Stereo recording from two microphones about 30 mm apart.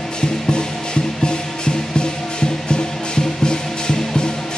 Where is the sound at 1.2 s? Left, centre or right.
Left.